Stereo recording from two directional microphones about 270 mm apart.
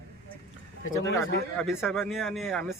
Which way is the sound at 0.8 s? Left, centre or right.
Left.